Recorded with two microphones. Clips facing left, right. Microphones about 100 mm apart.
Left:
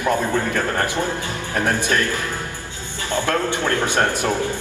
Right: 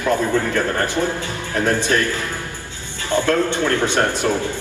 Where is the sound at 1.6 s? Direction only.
15° left (ahead or behind).